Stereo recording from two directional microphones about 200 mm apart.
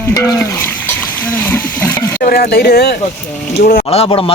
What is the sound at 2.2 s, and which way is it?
Speech, 50° left (ahead or behind).